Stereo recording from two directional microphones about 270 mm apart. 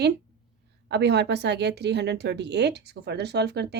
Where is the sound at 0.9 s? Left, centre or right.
Right.